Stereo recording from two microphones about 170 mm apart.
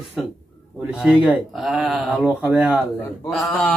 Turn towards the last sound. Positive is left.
turn(degrees=0)  # may be behind; listen again after turning